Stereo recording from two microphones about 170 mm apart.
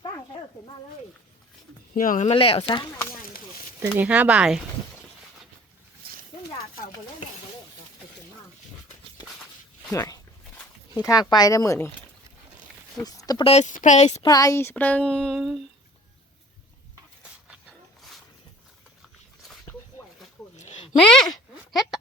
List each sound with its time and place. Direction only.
1.9 s speech: 55° left (ahead or behind)
2.3 s speech: 35° left (ahead or behind)
3.8 s speech: 10° right (ahead or behind)
9.9 s speech: 20° left (ahead or behind)
13.1 s speech: 20° left (ahead or behind)
13.4 s speech: 40° left (ahead or behind)
14.2 s speech: 20° left (ahead or behind); by 15.6 s centre (ahead or behind)
17.5 s dog: centre (ahead or behind)
20.6 s a sound: 40° left (ahead or behind)
21.1 s a sound: 5° left (ahead or behind)